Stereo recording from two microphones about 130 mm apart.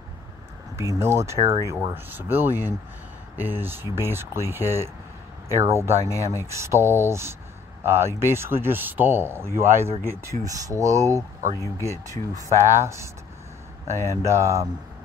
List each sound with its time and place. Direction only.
0.9 s speech: 20° right (ahead or behind)
6.0 s speech: 25° left (ahead or behind)
6.4 s speech: 20° right (ahead or behind)
13.9 s speech: 25° left (ahead or behind)
14.2 s speech: 20° right (ahead or behind)